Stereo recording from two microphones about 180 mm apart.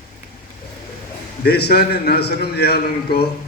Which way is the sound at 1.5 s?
65° left (ahead or behind).